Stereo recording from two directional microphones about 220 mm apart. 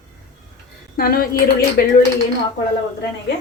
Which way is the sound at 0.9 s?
45° left (ahead or behind).